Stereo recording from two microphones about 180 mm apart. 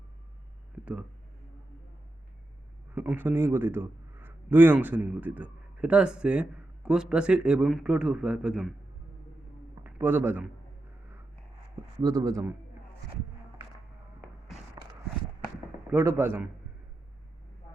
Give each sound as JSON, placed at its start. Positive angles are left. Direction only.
{"t": 2.9, "sound": "a man's voice", "side_deg": -10}
{"t": 9.8, "sound": "a man's voice", "side_deg": -10}
{"t": 11.9, "sound": "speech", "side_deg": -20}
{"t": 15.9, "sound": "a man's voice", "side_deg": -10}